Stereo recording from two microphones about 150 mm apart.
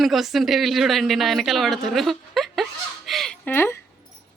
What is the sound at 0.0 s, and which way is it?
Speech, centre (ahead or behind).